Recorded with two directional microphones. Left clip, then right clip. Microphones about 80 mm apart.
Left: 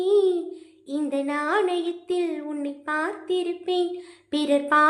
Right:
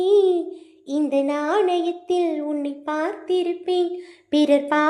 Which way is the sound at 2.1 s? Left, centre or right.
Right.